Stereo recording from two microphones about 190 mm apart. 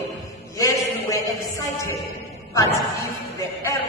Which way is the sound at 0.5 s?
15° left (ahead or behind).